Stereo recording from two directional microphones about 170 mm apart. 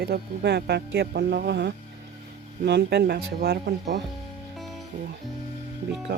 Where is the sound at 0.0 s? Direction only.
75° right (ahead or behind).